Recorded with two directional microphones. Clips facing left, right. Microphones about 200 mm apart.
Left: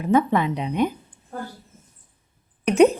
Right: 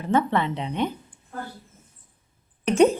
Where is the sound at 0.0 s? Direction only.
10° left (ahead or behind).